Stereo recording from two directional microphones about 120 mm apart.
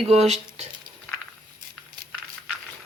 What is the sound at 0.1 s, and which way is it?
Speech, 60° right (ahead or behind).